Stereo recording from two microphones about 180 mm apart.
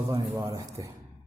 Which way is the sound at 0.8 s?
20° right (ahead or behind).